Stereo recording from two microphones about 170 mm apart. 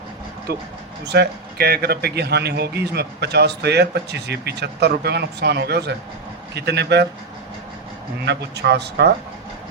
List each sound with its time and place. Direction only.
1.0 s speech: 80° right
8.2 s speech: 85° right